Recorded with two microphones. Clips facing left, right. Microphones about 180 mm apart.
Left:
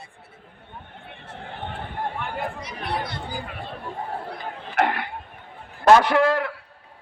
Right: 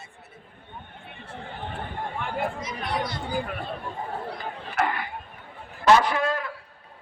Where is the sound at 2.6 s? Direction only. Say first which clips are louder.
Even; 65° left (ahead or behind).